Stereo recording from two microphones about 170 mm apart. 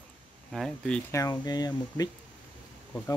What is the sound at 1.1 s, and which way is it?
Speech, 20° left (ahead or behind).